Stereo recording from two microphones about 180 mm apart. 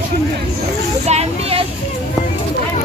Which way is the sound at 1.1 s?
35° right (ahead or behind).